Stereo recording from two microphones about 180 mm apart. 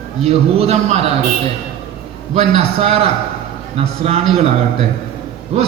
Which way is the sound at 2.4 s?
35° right (ahead or behind).